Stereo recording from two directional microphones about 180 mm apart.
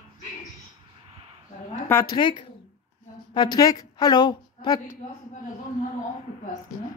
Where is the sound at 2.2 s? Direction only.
25° left (ahead or behind).